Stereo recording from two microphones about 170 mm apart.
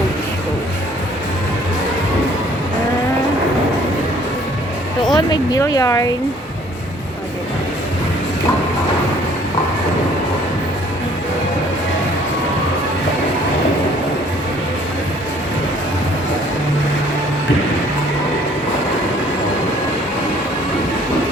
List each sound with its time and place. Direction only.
5.1 s speech: 25° left (ahead or behind)